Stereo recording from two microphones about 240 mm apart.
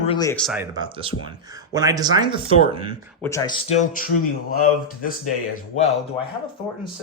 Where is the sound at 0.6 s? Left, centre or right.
Centre.